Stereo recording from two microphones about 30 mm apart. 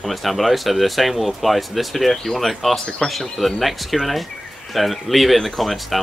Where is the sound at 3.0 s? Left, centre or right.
Left.